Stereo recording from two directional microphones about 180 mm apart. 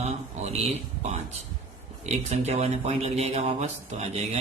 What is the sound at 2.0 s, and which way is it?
Speech, 40° right (ahead or behind).